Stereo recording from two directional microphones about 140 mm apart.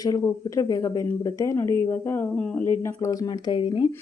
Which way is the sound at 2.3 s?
5° left (ahead or behind).